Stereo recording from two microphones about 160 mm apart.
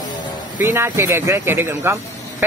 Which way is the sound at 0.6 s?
15° right (ahead or behind).